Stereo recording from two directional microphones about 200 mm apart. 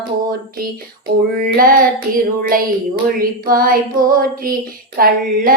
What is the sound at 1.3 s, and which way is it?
Child singing, 45° right (ahead or behind).